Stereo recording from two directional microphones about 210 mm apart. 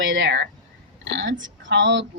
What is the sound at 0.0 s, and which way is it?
A woman's voice, 65° right (ahead or behind).